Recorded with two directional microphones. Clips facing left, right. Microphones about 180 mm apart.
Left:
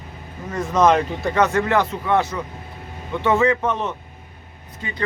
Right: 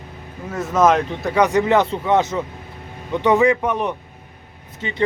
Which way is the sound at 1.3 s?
15° right (ahead or behind).